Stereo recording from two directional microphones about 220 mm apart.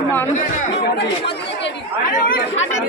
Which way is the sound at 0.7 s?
50° left (ahead or behind).